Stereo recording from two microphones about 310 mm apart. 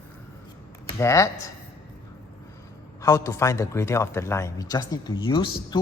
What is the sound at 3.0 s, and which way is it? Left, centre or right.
Speech, centre.